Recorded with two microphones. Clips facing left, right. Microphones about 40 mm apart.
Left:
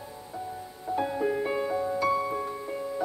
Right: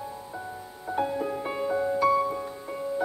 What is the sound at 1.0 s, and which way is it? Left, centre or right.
Music, centre.